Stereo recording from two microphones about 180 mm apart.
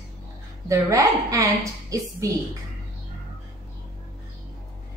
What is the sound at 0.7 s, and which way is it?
A woman's voice, 15° right (ahead or behind).